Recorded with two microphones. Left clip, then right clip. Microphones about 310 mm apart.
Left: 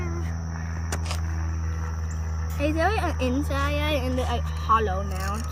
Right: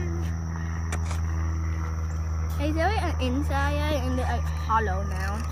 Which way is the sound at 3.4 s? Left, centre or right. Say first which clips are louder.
Left 1 dB; left.